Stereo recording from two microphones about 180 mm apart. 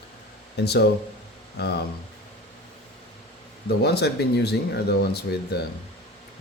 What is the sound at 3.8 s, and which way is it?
Speech, 65° left (ahead or behind).